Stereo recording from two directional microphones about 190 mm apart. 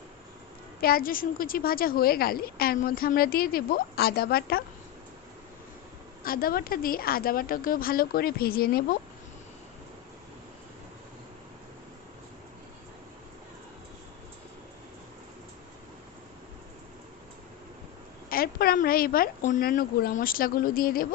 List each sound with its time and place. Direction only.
0.8 s a woman's voice: 50° left (ahead or behind)
6.2 s a woman's voice: 50° left (ahead or behind)
18.3 s a sound: 50° left (ahead or behind)
19.5 s a woman's voice: 45° left (ahead or behind)